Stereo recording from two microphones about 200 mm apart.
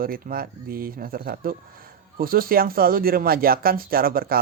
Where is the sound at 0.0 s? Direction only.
45° right (ahead or behind).